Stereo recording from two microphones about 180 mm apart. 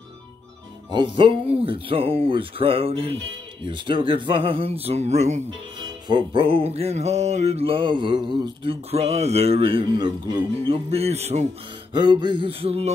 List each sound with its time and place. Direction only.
0.9 s music: 25° right (ahead or behind)
6.0 s music: 25° right (ahead or behind)
11.9 s speech: 25° right (ahead or behind)